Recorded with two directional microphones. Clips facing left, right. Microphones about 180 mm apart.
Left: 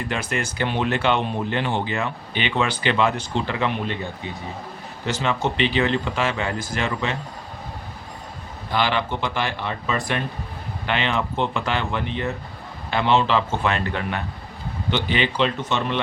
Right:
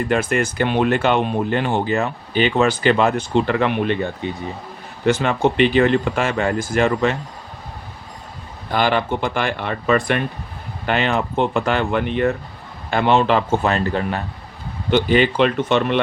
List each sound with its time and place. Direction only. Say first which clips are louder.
0.1 s speech: right 8 dB; 50° right (ahead or behind)
5.0 s speech: right 7 dB; 55° right (ahead or behind)
8.7 s speech: right 4 dB; 45° right (ahead or behind)
10.8 s speech: right 4 dB; 45° right (ahead or behind)
14.8 s speech: right 8 dB; 50° right (ahead or behind)